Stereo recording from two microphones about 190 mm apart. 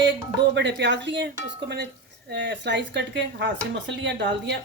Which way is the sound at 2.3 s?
65° right (ahead or behind).